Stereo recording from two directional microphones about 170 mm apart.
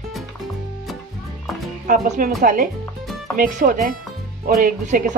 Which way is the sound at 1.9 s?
50° right (ahead or behind).